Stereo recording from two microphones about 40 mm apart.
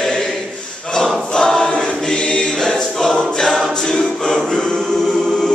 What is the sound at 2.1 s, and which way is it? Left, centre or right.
Choir, left.